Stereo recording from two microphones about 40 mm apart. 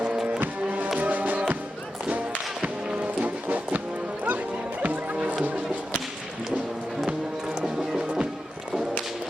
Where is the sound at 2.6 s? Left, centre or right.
Right.